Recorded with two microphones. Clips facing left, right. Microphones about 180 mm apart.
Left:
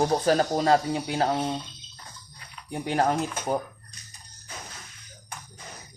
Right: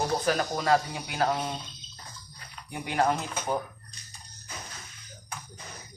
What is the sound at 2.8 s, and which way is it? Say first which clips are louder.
Speech: left 2 dB; 40° left (ahead or behind).